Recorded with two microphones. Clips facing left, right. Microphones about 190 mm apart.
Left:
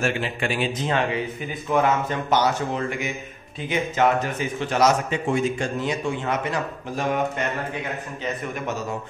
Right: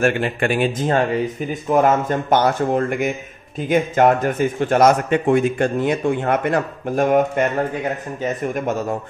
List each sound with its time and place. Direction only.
0.0 s a man's voice: 55° right (ahead or behind)